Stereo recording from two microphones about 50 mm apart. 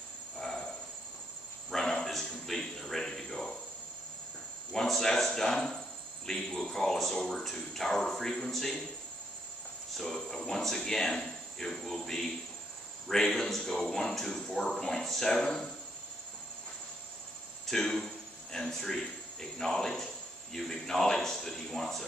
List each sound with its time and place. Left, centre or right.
0.4 s a sound: centre
1.7 s a sound: centre
4.7 s speech: centre
9.9 s speech: centre
17.6 s cricket: centre
18.6 s speech: centre